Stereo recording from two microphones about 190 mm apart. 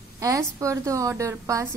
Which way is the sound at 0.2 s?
15° right (ahead or behind).